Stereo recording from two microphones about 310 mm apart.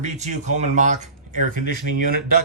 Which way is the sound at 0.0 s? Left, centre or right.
Right.